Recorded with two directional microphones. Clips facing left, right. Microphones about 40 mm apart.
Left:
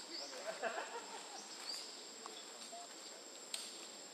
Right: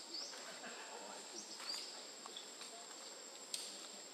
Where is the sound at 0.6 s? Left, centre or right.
Left.